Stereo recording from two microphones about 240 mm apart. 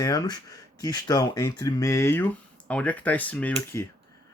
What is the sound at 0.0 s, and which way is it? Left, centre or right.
Speech, centre.